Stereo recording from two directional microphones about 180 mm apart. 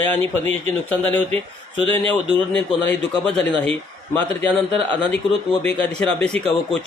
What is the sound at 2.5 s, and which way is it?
A man's voice, 5° left (ahead or behind).